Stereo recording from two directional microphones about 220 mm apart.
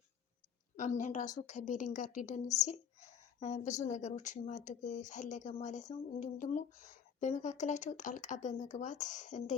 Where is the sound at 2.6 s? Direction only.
30° left (ahead or behind).